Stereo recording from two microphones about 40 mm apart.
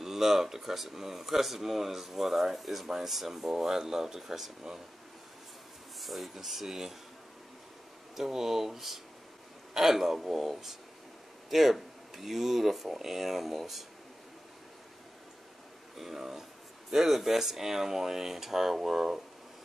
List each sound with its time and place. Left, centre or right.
0.0 s speech: centre
5.9 s speech: centre
8.2 s speech: centre
16.0 s speech: centre